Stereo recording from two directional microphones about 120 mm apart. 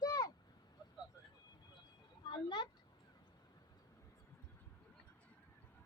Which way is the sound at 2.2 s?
40° left (ahead or behind).